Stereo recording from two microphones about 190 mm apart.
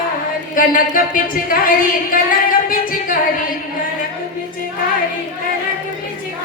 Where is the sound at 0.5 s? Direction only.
45° left (ahead or behind).